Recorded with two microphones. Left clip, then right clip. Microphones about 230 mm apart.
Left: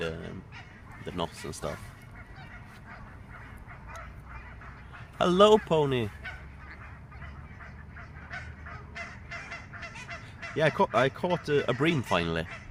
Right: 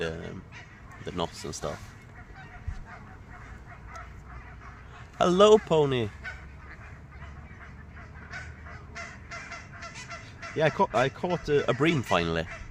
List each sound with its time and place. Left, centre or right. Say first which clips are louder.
0.0 s speech: right 1 dB; centre
5.1 s speech: right 2 dB; centre
9.0 s honk: right 1 dB; right
10.5 s speech: even; centre